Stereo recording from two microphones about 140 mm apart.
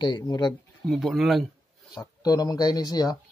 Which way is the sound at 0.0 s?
30° left (ahead or behind).